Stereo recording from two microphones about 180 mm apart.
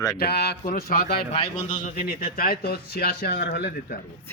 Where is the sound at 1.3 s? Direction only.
30° left (ahead or behind).